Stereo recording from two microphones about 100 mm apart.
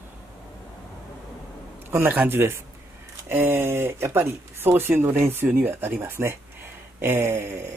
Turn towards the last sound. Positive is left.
turn(degrees=-25)  # may be behind; listen again after turning